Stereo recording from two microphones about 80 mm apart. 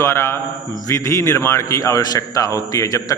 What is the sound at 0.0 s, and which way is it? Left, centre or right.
A man's voice, left.